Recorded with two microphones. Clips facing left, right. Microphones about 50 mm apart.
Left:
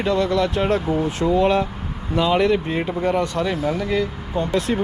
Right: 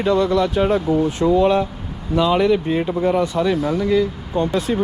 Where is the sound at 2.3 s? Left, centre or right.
Left.